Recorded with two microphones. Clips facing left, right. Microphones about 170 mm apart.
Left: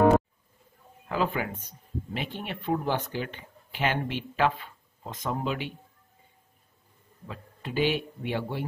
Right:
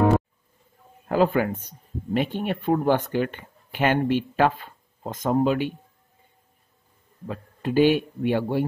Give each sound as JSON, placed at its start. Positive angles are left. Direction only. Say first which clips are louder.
{"t": 1.0, "sound": "speech", "louder": "right 8 dB", "side_deg": -45}
{"t": 7.2, "sound": "speech", "louder": "right 10 dB", "side_deg": -45}